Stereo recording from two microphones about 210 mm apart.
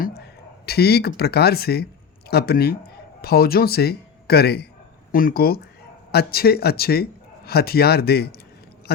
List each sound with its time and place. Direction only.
0.0 s a man's voice: 50° left (ahead or behind)